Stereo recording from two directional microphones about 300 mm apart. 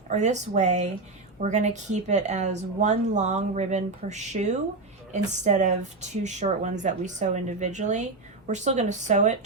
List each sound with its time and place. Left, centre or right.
0.1 s speech: right